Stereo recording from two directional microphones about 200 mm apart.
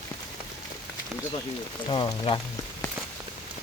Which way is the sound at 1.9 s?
25° left (ahead or behind).